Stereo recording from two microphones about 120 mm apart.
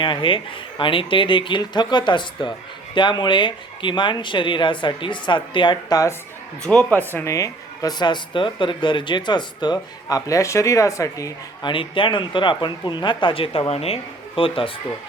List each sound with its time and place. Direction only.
0.0 s speech: 45° left (ahead or behind)
6.6 s speech: 10° left (ahead or behind); by 11.3 s 25° left (ahead or behind)
11.6 s speech: 45° left (ahead or behind)